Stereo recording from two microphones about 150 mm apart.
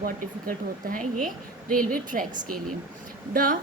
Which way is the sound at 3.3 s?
65° right (ahead or behind).